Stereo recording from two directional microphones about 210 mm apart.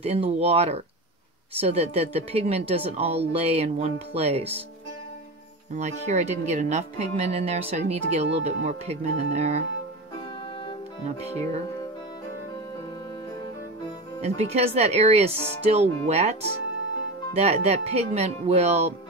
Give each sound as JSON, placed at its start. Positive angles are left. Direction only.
{"t": 0.0, "sound": "speech", "side_deg": -30}
{"t": 5.8, "sound": "speech", "side_deg": -35}
{"t": 14.2, "sound": "speech", "side_deg": -30}
{"t": 17.4, "sound": "speech", "side_deg": -30}